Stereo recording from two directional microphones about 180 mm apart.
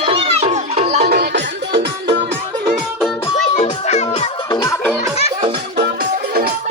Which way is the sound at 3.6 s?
40° left (ahead or behind).